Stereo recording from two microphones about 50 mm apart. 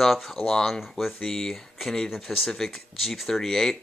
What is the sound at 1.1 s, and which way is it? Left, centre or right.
Speech, centre.